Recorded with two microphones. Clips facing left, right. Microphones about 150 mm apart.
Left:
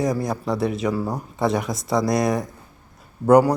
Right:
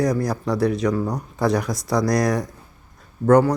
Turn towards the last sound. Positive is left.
turn(degrees=10)  # may be behind; listen again after turning